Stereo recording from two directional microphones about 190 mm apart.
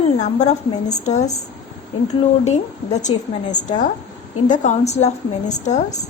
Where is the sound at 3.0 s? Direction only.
40° left (ahead or behind).